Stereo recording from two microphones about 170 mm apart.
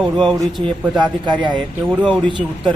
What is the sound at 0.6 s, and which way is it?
Speech, 25° right (ahead or behind).